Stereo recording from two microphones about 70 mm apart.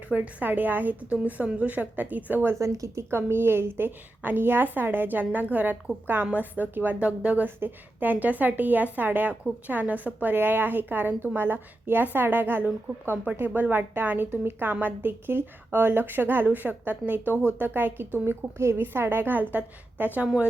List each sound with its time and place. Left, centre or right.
0.1 s a woman's voice: right
2.6 s speech: right
3.1 s a woman's voice: right
18.3 s a woman's voice: right
20.2 s a woman's voice: centre